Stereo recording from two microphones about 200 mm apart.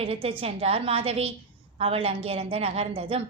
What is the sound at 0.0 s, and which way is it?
A woman's voice, 30° right (ahead or behind).